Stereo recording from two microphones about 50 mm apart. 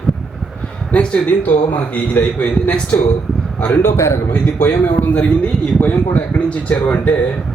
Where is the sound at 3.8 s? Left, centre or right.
Left.